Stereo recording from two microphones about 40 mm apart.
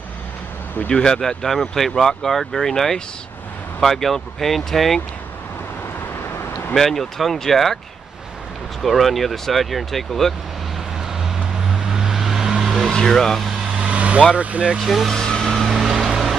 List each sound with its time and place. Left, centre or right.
0.8 s speech: centre
6.7 s speech: centre
8.8 s speech: centre
11.2 s vehicle: centre
12.9 s speech: centre
13.7 s vehicle: right
14.3 s speech: right
14.8 s speech: centre
15.1 s vehicle: centre
15.5 s vehicle: centre
16.1 s music: centre